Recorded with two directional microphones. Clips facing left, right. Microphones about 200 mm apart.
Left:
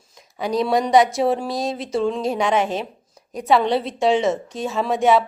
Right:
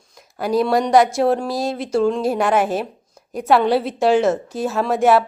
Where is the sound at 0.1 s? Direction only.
Centre (ahead or behind).